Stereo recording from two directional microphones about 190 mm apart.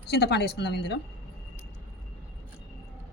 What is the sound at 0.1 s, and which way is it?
Speech, 60° left (ahead or behind).